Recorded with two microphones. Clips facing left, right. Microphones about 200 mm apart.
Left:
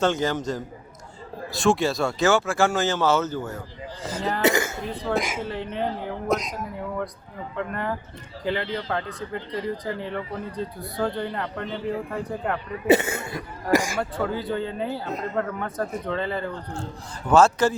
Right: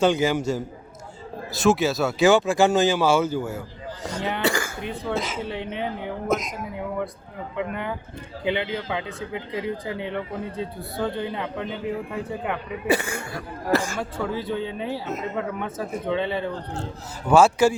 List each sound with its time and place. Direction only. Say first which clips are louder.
0.0 s speech: right 3 dB; 10° right (ahead or behind)
4.4 s throat clearing: left 4 dB; 20° left (ahead or behind)
5.1 s speech: left 3 dB; 10° left (ahead or behind)
5.4 s speech: left 1 dB; 5° right (ahead or behind)
7.5 s speech: even; centre (ahead or behind)
12.9 s speech: left 5 dB; 20° left (ahead or behind)
13.7 s speech: left 1 dB; 10° left (ahead or behind)
14.0 s speech: left 1 dB; centre (ahead or behind)